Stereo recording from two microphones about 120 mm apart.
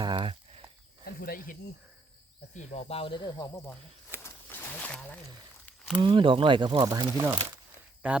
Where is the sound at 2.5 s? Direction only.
70° left (ahead or behind); by 3.6 s 30° left (ahead or behind).